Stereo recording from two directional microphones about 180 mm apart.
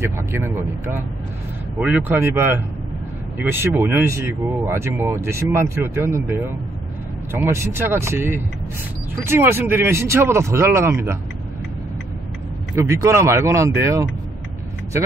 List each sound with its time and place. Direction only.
1.8 s speech: 10° right (ahead or behind)
12.8 s speech: 15° right (ahead or behind)